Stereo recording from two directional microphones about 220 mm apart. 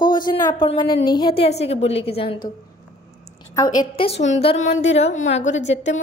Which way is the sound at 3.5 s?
15° left (ahead or behind).